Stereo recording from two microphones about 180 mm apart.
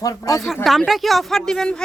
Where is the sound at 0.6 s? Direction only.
Centre (ahead or behind).